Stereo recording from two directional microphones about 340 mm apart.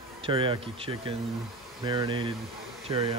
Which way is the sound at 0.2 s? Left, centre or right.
Centre.